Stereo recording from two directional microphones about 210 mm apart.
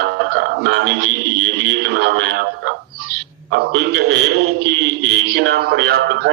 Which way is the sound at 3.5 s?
50° right (ahead or behind).